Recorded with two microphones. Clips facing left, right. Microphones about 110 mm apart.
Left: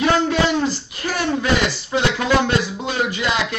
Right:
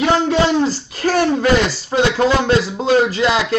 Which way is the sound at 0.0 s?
25° right (ahead or behind).